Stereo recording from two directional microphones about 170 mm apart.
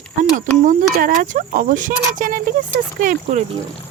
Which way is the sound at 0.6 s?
55° right (ahead or behind).